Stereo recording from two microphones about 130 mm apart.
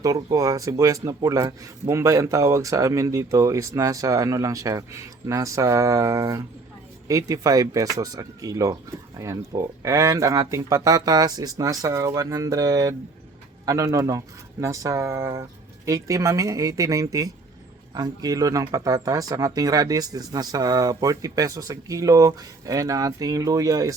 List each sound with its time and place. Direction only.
0.0 s speech: 25° right (ahead or behind)
9.8 s speech: 25° right (ahead or behind)